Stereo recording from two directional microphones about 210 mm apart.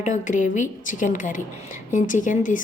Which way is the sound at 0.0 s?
35° left (ahead or behind).